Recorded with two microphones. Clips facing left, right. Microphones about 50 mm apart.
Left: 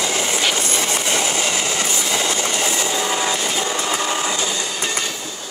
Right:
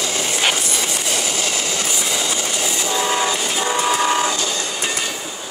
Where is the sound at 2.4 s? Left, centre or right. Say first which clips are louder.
Left 2 dB; left.